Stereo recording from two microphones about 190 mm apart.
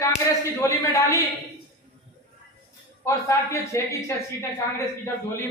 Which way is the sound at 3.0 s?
15° left (ahead or behind).